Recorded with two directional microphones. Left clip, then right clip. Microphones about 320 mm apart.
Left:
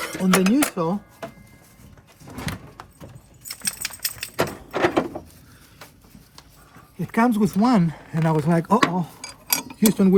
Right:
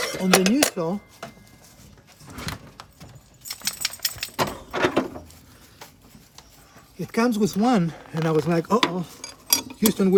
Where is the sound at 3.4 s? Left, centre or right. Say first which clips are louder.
Right 2 dB; right.